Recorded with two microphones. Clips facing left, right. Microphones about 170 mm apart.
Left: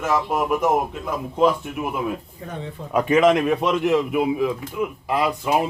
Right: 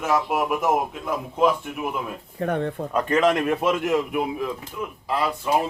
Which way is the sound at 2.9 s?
10° left (ahead or behind).